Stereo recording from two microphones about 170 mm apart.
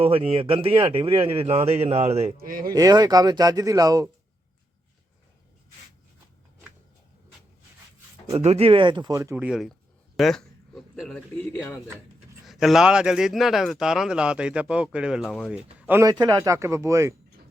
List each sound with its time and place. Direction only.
0.0 s a man's voice: 35° right (ahead or behind)
2.4 s speech: 55° right (ahead or behind)
2.7 s speech: 20° right (ahead or behind)
8.4 s speech: 35° right (ahead or behind); by 17.2 s 15° right (ahead or behind)